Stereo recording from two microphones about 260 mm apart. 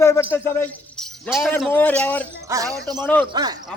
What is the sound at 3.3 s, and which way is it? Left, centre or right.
Speech, centre.